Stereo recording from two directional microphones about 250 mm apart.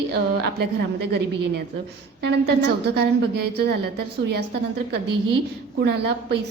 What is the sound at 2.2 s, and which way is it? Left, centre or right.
A woman's voice, right.